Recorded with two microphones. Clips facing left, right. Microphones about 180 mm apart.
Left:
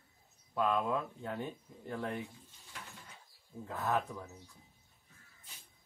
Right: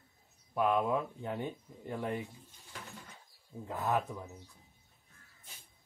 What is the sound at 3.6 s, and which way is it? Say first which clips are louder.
Speech: right 1 dB; 15° right (ahead or behind).